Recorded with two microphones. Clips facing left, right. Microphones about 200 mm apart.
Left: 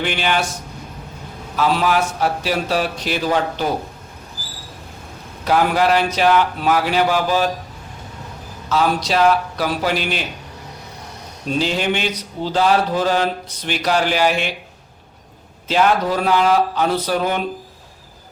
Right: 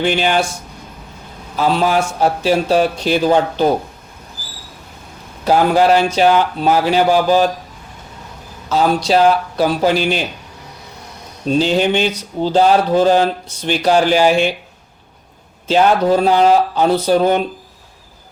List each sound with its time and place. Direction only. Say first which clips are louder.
0.0 s speech: right 5 dB; 35° right (ahead or behind)
1.5 s a man's voice: right 3 dB; 30° right (ahead or behind)
5.5 s speech: right 4 dB; 30° right (ahead or behind)
8.7 s speech: right 4 dB; 30° right (ahead or behind)
11.4 s speech: right 5 dB; 30° right (ahead or behind)
15.6 s speech: right 4 dB; 30° right (ahead or behind)